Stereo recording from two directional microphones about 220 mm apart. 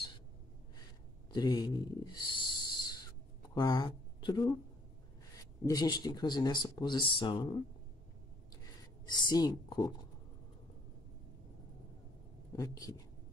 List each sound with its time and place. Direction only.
1.3 s a sound: 15° left (ahead or behind)
3.5 s speech: 20° left (ahead or behind)
8.6 s speech: 20° left (ahead or behind)
12.5 s speech: 15° left (ahead or behind)